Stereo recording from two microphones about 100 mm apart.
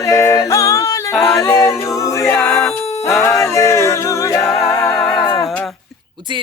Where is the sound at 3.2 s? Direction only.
30° left (ahead or behind).